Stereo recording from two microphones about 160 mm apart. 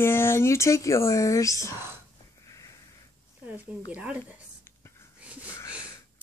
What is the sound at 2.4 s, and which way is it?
Sniff, 20° left (ahead or behind).